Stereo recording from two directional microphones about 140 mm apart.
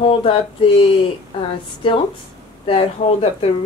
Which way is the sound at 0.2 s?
40° left (ahead or behind).